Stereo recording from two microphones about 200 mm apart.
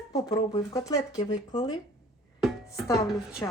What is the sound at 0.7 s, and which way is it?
Speech, 15° left (ahead or behind).